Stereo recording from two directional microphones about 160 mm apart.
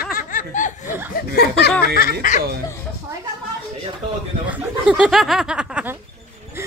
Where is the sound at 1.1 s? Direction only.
85° left.